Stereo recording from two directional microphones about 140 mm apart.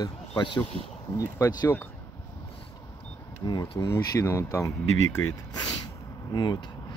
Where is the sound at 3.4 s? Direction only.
30° left (ahead or behind).